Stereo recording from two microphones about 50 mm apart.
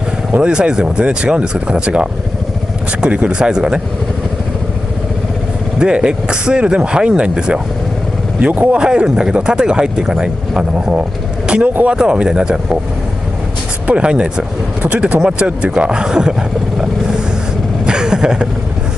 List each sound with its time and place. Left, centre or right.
0.4 s speech: centre
5.8 s speech: centre
8.4 s speech: right
8.7 s speech: centre
13.8 s speech: right
17.8 s vehicle: centre